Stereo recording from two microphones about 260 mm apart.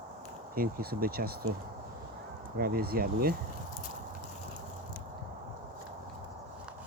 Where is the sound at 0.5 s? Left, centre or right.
Right.